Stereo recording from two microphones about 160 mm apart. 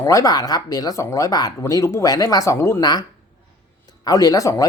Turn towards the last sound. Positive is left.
turn(degrees=20)  # may be behind; listen again after turning